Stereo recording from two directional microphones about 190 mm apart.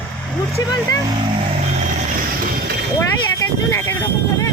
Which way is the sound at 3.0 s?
15° left (ahead or behind).